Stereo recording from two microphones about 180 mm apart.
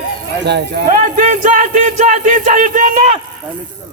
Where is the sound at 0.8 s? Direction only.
50° right (ahead or behind).